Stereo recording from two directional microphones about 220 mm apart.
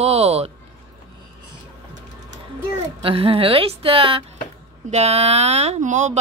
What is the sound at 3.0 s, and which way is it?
Speech, 25° right (ahead or behind).